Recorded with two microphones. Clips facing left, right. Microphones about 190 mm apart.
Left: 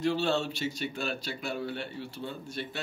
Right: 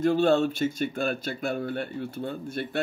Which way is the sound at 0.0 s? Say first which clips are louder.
Right 7 dB; 50° right (ahead or behind).